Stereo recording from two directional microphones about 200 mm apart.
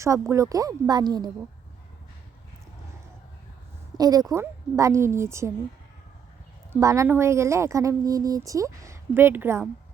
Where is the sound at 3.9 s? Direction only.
20° right (ahead or behind).